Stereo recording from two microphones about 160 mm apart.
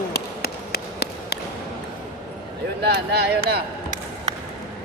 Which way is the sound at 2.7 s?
90° right.